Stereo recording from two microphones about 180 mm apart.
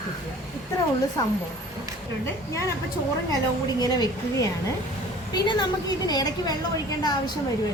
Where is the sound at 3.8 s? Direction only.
20° left (ahead or behind).